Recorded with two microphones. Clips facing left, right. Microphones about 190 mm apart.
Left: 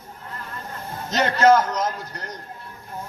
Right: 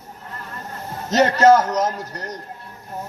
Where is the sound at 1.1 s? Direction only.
40° right (ahead or behind).